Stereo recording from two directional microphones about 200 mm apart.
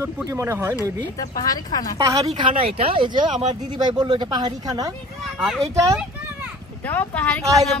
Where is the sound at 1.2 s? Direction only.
20° left (ahead or behind).